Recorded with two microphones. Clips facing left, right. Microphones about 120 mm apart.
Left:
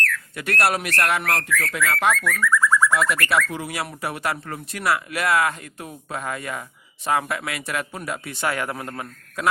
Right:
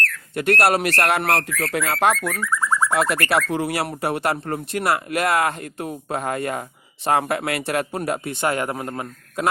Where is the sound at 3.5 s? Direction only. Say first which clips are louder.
Right 6 dB; 60° right (ahead or behind).